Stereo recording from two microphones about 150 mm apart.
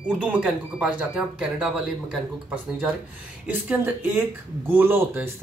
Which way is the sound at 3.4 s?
10° right (ahead or behind).